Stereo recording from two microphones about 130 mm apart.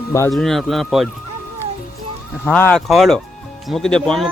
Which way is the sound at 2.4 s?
15° left (ahead or behind).